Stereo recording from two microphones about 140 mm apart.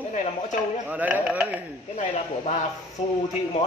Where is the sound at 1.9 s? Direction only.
55° left (ahead or behind).